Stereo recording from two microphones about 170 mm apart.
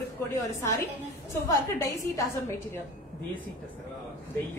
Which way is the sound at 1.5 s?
20° left (ahead or behind).